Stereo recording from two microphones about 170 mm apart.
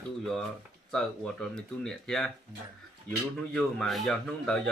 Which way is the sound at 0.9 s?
5° left (ahead or behind).